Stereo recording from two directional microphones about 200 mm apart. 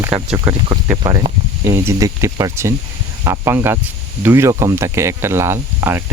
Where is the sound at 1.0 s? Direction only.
20° right (ahead or behind).